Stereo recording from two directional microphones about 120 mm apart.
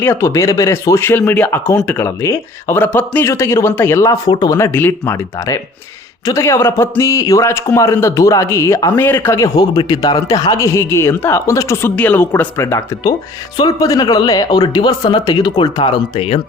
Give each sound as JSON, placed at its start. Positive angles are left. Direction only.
{"t": 0.0, "sound": "a man's voice", "side_deg": 20}
{"t": 2.0, "sound": "speech", "side_deg": 20}
{"t": 3.2, "sound": "a man's voice", "side_deg": 25}